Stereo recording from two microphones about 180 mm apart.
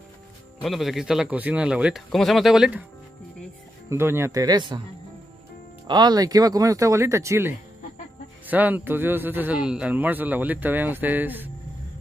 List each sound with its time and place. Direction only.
0.6 s speech: centre (ahead or behind)
3.9 s speech: 15° right (ahead or behind)
5.9 s a man's voice: 25° right (ahead or behind)